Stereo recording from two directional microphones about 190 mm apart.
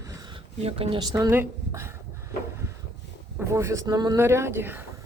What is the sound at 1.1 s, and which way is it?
Speech, 15° right (ahead or behind).